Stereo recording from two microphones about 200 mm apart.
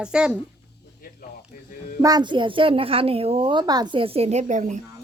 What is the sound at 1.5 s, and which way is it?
Speech, 40° left (ahead or behind).